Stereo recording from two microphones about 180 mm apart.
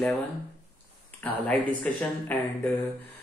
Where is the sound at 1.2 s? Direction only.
5° left (ahead or behind).